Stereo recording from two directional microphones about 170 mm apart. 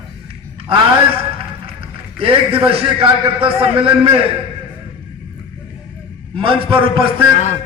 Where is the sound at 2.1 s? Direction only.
35° right (ahead or behind).